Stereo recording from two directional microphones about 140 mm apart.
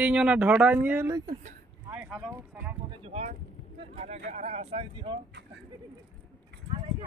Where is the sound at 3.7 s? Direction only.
45° right (ahead or behind).